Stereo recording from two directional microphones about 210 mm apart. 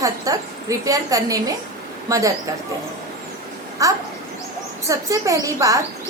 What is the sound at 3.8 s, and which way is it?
A woman's voice, 15° right (ahead or behind).